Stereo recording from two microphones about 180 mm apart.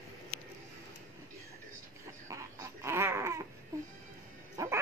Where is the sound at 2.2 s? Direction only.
15° right (ahead or behind).